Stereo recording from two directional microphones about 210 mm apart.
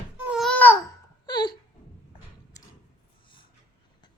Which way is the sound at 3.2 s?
25° left (ahead or behind).